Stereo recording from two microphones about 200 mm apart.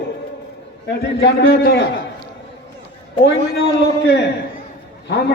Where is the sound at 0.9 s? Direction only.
60° left (ahead or behind).